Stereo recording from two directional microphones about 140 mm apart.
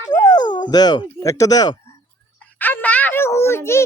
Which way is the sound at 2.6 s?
15° left (ahead or behind).